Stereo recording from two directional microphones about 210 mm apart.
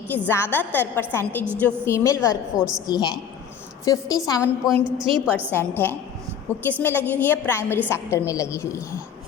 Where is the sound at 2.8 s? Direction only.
20° left (ahead or behind).